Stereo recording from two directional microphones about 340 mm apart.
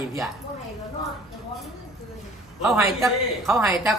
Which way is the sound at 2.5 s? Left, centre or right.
Centre.